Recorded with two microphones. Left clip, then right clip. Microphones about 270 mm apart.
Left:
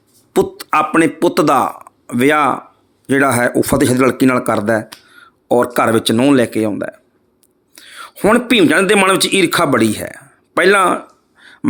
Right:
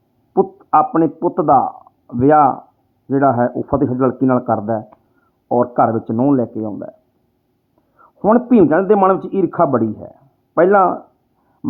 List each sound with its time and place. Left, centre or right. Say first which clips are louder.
0.3 s speech: right 1 dB; left
7.9 s speech: left 1 dB; left